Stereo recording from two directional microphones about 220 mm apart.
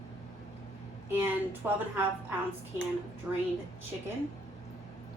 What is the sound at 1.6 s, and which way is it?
Speech, 10° right (ahead or behind).